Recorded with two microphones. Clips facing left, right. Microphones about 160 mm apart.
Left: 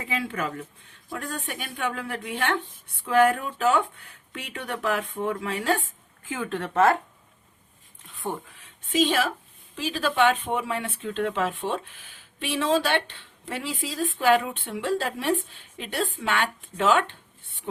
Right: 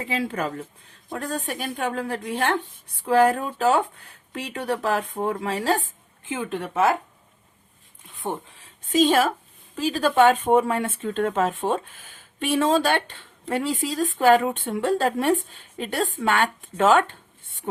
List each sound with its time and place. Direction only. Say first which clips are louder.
0.0 s speech: right 3 dB; 35° right (ahead or behind)
6.2 s speech: right 2 dB; 20° right (ahead or behind)
8.9 s speech: right 4 dB; 45° right (ahead or behind)